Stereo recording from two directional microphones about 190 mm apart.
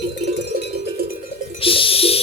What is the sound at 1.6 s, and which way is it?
Music, 30° left (ahead or behind).